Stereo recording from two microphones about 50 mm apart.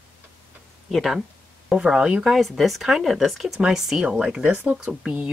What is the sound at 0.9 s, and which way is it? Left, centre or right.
Speech, centre.